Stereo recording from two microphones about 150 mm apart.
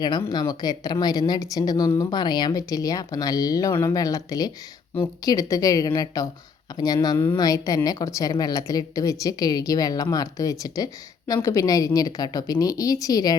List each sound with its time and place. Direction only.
0.3 s a woman's voice: 25° left (ahead or behind)